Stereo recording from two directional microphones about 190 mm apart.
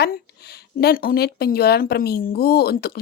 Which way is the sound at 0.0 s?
60° left (ahead or behind).